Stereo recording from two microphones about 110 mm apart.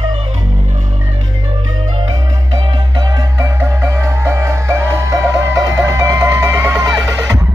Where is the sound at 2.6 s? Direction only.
45° right (ahead or behind); by 6.7 s 25° right (ahead or behind).